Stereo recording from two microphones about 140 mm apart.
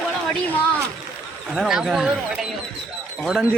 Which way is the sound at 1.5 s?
5° right (ahead or behind).